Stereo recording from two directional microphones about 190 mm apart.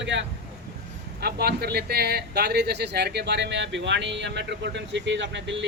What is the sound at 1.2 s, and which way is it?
Speech, 60° right (ahead or behind).